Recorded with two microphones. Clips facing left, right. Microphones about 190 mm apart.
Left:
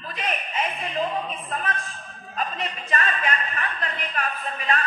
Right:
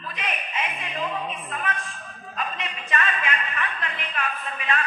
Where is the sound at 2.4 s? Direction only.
35° left (ahead or behind).